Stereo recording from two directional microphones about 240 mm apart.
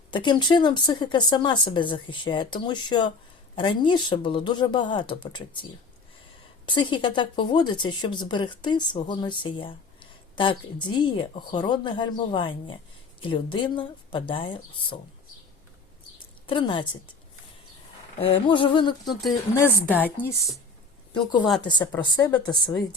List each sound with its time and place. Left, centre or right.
0.1 s speech: centre
6.7 s speech: centre
16.5 s speech: left
18.2 s speech: left
20.1 s speech: centre
21.1 s speech: centre